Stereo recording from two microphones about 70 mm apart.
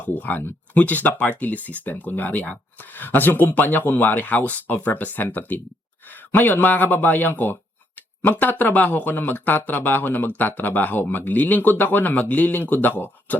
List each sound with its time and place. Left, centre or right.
0.0 s speech: left